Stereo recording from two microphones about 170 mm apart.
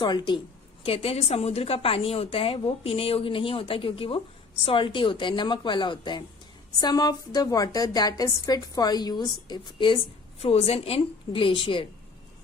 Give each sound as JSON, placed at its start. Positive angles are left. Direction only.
{"t": 0.0, "sound": "a woman's voice", "side_deg": 25}